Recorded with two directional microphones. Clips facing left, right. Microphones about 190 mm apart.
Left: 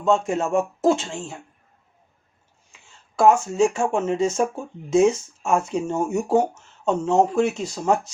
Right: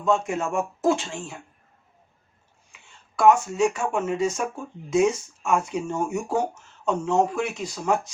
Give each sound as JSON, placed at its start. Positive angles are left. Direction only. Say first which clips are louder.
{"t": 0.0, "sound": "speech", "louder": "left 3 dB", "side_deg": 25}
{"t": 3.2, "sound": "speech", "louder": "left 2 dB", "side_deg": 30}